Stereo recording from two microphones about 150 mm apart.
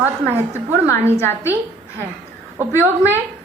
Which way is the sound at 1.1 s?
15° left (ahead or behind).